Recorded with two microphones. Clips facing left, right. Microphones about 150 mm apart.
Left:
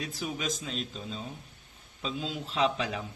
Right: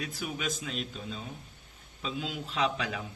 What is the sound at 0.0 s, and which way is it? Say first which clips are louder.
A man's voice: left 1 dB; 35° left (ahead or behind).